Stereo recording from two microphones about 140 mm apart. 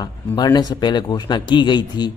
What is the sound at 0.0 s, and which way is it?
Speech, 30° left (ahead or behind).